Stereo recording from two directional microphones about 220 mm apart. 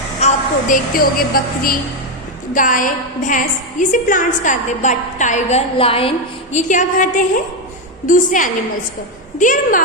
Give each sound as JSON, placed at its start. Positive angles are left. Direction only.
{"t": 0.2, "sound": "a woman's voice", "side_deg": 35}